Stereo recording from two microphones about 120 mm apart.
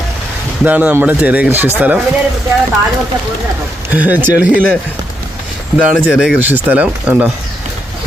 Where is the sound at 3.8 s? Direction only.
15° right (ahead or behind).